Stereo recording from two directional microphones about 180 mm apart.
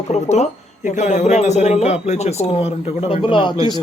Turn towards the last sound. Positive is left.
turn(degrees=30)  # may be behind; listen again after turning